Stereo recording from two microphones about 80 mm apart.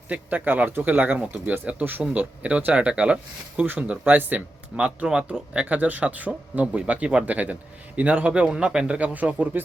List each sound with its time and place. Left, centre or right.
0.1 s speech: centre